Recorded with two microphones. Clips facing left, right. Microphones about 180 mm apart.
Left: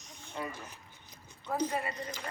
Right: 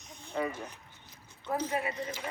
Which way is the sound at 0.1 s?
Centre (ahead or behind).